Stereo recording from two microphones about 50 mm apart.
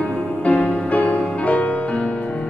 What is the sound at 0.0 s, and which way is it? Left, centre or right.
Music, left.